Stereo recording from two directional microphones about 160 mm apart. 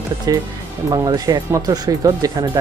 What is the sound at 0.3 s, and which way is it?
Speech, 25° right (ahead or behind).